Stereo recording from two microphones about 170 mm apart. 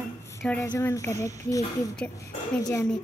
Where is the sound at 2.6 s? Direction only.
15° left (ahead or behind).